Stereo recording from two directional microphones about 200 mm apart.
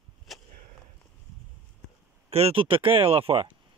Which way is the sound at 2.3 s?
30° right (ahead or behind).